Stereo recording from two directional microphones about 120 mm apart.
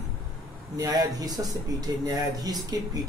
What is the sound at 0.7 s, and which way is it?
Speech, 30° right (ahead or behind).